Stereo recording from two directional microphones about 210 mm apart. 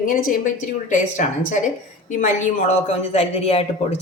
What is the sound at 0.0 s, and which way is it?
A woman's voice, 40° left (ahead or behind).